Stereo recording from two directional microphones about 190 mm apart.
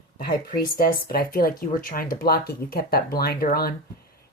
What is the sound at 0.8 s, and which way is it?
Speech, 50° left (ahead or behind).